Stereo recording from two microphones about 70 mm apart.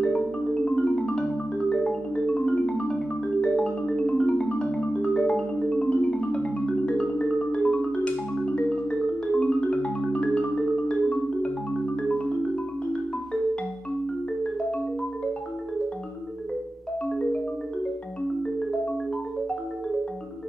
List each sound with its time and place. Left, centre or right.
0.0 s music: centre